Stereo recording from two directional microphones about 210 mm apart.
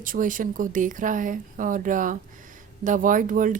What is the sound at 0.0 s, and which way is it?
A woman's voice, 40° right (ahead or behind).